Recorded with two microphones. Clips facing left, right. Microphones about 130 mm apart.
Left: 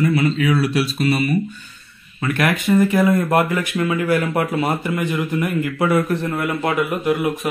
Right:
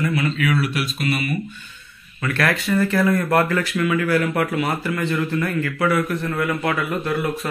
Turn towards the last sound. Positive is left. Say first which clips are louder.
# left 4 dB
turn(degrees=20)  # may be behind; listen again after turning